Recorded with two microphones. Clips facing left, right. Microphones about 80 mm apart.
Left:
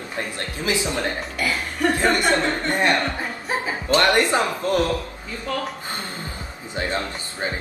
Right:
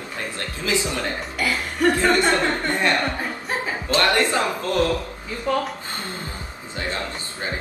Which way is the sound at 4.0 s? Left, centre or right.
Left.